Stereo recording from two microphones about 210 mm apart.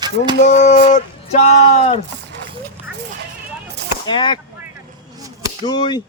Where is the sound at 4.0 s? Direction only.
20° left (ahead or behind).